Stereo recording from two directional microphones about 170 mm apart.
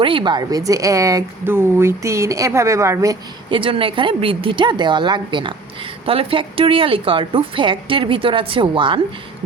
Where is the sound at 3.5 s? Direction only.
30° right (ahead or behind).